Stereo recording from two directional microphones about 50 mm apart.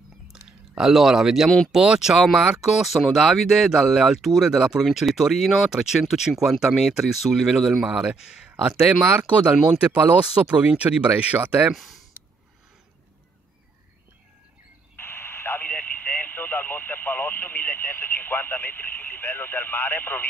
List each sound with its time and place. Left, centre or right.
0.3 s a sound: centre
1.7 s speech: centre
7.9 s speech: centre
9.0 s speech: right
11.7 s speech: centre
15.0 s radio: left